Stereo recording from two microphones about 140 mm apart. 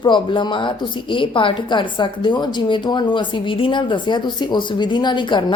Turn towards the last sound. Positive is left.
turn(degrees=35)  # may be behind; listen again after turning